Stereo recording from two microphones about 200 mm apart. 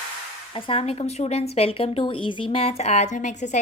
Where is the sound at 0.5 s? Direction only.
30° left (ahead or behind).